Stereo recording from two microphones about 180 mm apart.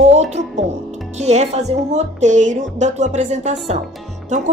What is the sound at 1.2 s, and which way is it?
A woman's voice, 40° right (ahead or behind).